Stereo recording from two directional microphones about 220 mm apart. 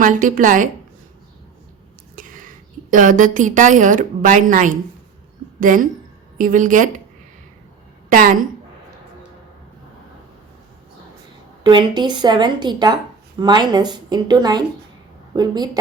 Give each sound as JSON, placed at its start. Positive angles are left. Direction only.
{"t": 0.0, "sound": "a woman's voice", "side_deg": -35}
{"t": 2.1, "sound": "a sound", "side_deg": -40}
{"t": 2.9, "sound": "a woman's voice", "side_deg": -35}
{"t": 8.1, "sound": "a woman's voice", "side_deg": -40}
{"t": 11.6, "sound": "a woman's voice", "side_deg": -20}